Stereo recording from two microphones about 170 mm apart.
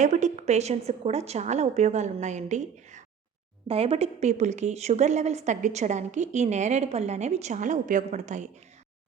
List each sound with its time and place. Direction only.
0.0 s a woman's voice: 45° right (ahead or behind)